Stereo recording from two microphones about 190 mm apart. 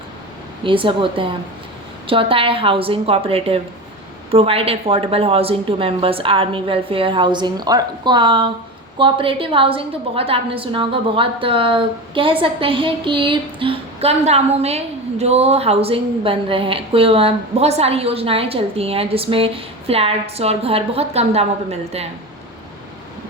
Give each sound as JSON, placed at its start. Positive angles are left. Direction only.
{"t": 0.6, "sound": "a woman's voice", "side_deg": -25}